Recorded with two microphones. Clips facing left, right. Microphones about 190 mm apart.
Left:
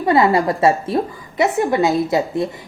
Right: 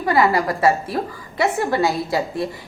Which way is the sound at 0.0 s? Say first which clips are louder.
Left 3 dB; 25° left (ahead or behind).